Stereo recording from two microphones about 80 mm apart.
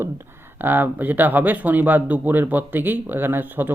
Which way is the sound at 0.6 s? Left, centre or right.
Right.